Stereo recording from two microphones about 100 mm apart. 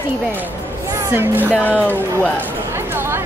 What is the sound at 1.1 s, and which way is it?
Speech, 20° right (ahead or behind).